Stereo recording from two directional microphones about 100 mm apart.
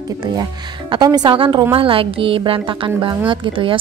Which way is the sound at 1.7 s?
65° right (ahead or behind).